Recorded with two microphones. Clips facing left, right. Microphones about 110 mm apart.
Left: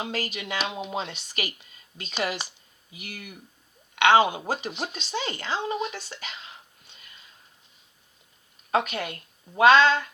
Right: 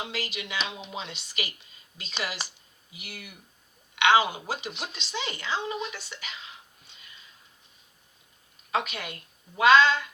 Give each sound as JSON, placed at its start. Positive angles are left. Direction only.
{"t": 0.0, "sound": "speech", "side_deg": 45}
{"t": 8.7, "sound": "speech", "side_deg": 45}